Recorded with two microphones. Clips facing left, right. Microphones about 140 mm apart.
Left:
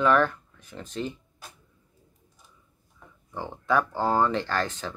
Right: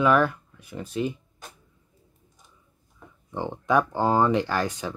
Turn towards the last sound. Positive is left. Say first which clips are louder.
# right 2 dB
turn(degrees=-10)  # may be behind; listen again after turning